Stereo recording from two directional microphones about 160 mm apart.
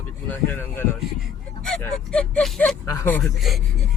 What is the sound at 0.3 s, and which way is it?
Speech, 15° left (ahead or behind).